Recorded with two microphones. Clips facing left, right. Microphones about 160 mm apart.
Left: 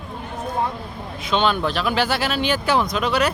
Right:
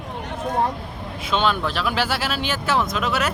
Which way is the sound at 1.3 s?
Centre (ahead or behind).